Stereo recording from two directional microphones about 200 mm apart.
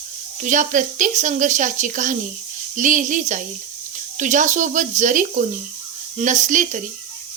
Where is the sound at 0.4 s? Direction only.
40° right (ahead or behind).